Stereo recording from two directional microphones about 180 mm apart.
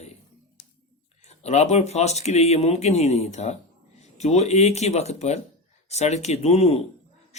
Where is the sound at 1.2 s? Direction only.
35° left (ahead or behind).